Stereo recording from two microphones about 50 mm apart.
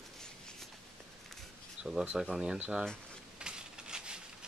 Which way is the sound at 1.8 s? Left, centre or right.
Centre.